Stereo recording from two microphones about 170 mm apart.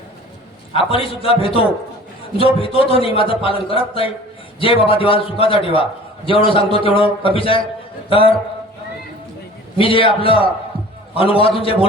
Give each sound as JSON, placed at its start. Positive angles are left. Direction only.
{"t": 0.7, "sound": "a man's voice", "side_deg": 35}
{"t": 9.7, "sound": "a man's voice", "side_deg": 30}